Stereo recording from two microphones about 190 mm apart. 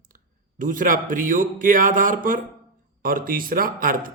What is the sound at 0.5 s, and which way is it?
Speech, 45° right (ahead or behind).